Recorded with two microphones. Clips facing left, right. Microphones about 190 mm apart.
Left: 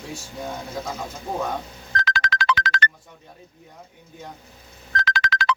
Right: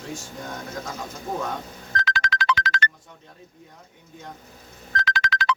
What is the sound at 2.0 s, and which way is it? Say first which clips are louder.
Music: left 1 dB; 65° left (ahead or behind).